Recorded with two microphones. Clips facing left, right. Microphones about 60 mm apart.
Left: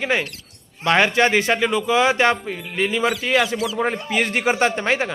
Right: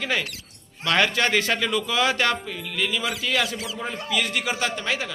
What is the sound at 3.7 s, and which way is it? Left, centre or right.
Speech, left.